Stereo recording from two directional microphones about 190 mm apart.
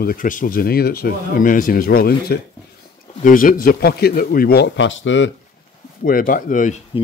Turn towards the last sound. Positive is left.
turn(degrees=40)  # may be behind; listen again after turning